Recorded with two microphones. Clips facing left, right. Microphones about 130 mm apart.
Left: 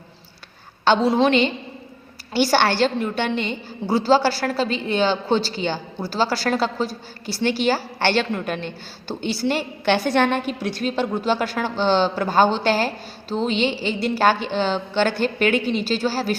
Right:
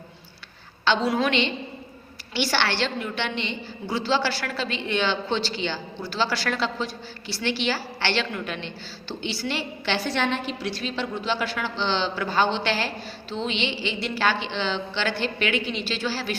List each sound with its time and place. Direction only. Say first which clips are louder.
1.0 s a woman's voice: left 6 dB; 30° left (ahead or behind)
2.3 s a woman's voice: left 7 dB; 45° left (ahead or behind)